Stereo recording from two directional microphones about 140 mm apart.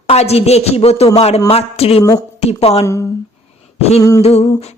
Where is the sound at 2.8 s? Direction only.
20° left (ahead or behind).